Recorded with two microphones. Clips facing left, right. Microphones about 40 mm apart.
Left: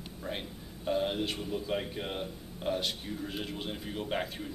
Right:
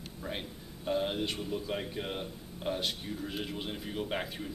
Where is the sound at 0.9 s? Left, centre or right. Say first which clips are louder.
Left 1 dB; centre.